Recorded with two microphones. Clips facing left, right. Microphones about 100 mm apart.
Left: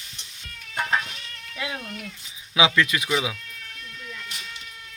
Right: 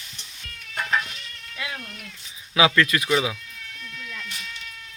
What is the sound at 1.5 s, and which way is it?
Cat, 20° left (ahead or behind).